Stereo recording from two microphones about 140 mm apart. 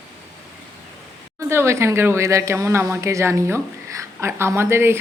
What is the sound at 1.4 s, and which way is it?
A woman's voice, 20° right (ahead or behind).